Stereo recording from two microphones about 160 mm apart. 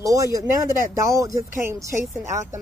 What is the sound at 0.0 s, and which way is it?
Speech, 20° right (ahead or behind).